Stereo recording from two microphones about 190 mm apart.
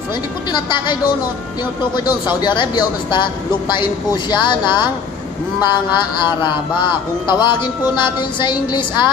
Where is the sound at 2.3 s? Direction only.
25° left (ahead or behind).